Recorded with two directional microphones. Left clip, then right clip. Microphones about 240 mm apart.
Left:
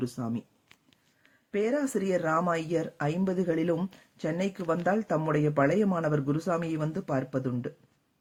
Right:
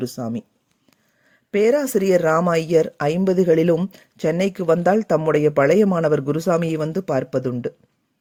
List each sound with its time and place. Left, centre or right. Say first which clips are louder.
0.0 s speech: right 7 dB; right
1.5 s speech: right 11 dB; right